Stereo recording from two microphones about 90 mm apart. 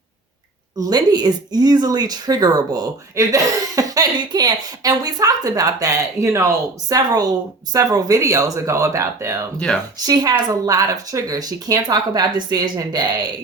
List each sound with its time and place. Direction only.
0.9 s speech: 50° right (ahead or behind); by 9.5 s 35° right (ahead or behind)
10.7 s speech: 40° right (ahead or behind)